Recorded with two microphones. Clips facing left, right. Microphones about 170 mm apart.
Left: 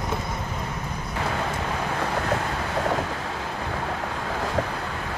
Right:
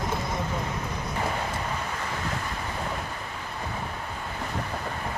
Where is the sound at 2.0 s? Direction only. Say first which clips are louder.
Left 7 dB; 70° left (ahead or behind); by 4.7 s 90° left.